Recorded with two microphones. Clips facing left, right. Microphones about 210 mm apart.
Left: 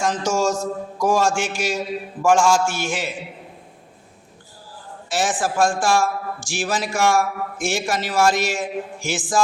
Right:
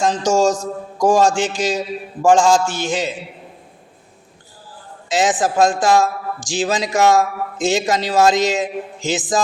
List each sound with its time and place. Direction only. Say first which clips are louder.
0.2 s a man's voice: right 5 dB; 15° right (ahead or behind)
5.0 s speech: right 5 dB; 20° right (ahead or behind)